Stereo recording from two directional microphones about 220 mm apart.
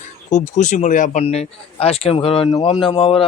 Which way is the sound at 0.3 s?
35° left (ahead or behind).